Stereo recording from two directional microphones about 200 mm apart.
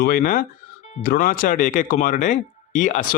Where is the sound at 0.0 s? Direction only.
45° left (ahead or behind).